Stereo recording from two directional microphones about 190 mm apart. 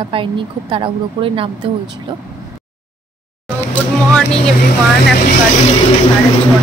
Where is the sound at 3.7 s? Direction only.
5° left (ahead or behind).